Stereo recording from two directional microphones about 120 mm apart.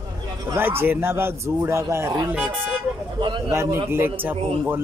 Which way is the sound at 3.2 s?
40° right (ahead or behind).